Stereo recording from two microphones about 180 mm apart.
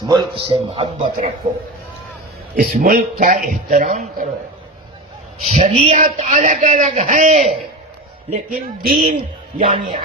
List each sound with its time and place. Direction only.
0.1 s a man's voice: 25° right (ahead or behind)
2.6 s a man's voice: 55° right (ahead or behind)
5.5 s a man's voice: 35° right (ahead or behind)
8.8 s a woman's voice: 60° right (ahead or behind)
9.6 s a man's voice: 25° right (ahead or behind)